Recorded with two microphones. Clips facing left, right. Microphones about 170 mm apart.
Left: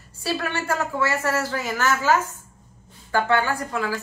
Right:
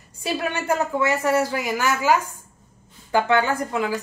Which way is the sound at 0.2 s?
15° right (ahead or behind).